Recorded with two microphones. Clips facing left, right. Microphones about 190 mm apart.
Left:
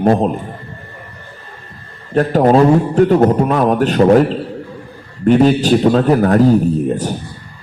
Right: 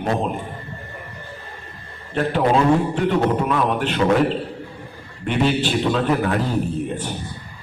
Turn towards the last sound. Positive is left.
turn(degrees=40)  # may be behind; listen again after turning